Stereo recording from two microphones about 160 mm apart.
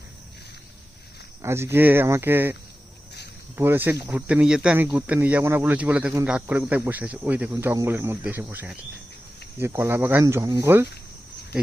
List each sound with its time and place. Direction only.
1.4 s speech: 15° right (ahead or behind)
3.6 s speech: 15° right (ahead or behind)